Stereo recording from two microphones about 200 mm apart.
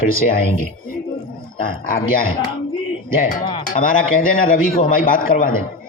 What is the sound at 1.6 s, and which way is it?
Speech, 45° left (ahead or behind).